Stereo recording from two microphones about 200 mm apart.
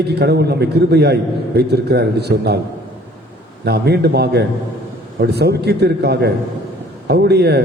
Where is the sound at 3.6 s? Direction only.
55° right (ahead or behind).